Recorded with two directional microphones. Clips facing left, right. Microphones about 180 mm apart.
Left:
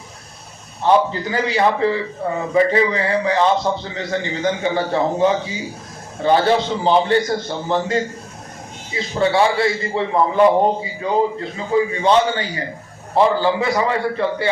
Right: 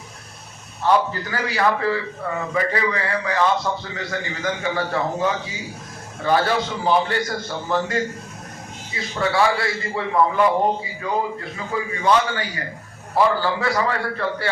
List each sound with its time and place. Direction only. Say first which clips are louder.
0.8 s a man's voice: left 3 dB; 20° left (ahead or behind)